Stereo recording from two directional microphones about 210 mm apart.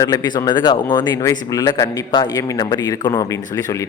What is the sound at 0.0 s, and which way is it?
A man's voice, 15° left (ahead or behind).